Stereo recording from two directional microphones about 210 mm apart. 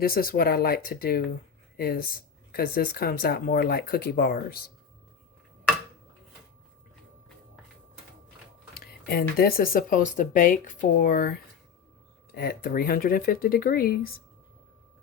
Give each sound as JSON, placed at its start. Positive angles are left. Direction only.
{"t": 0.0, "sound": "speech", "side_deg": 45}
{"t": 8.7, "sound": "speech", "side_deg": 50}